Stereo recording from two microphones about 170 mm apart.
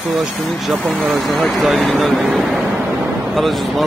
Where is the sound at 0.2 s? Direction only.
Centre (ahead or behind).